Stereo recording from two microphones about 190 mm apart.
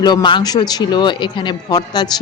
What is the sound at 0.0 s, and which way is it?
Speech, 20° left (ahead or behind).